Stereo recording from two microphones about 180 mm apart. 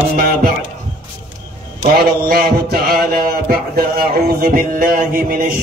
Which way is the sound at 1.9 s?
60° right (ahead or behind).